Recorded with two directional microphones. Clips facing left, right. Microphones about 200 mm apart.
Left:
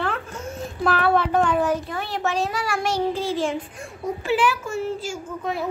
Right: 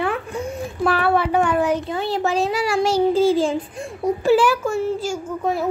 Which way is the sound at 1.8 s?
25° right (ahead or behind).